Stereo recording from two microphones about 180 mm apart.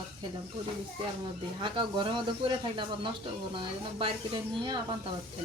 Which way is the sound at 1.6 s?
25° right (ahead or behind).